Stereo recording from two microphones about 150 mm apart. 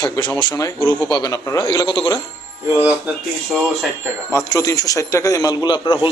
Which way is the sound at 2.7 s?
15° right (ahead or behind).